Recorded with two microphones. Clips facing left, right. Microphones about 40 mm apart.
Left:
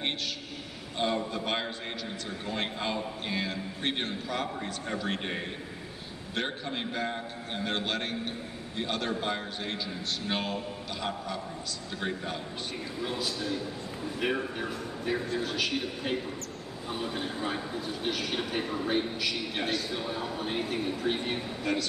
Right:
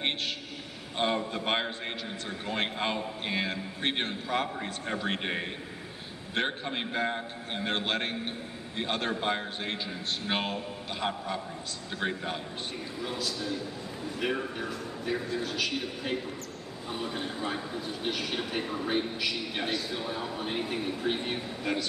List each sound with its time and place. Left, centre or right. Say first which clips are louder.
0.0 s a sound: right 1 dB; right
0.9 s a man's voice: right 1 dB; right
6.3 s a man's voice: right 2 dB; right
13.0 s a man's voice: left 1 dB; centre